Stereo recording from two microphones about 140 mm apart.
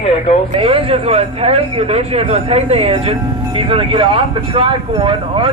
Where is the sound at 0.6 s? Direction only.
40° right (ahead or behind).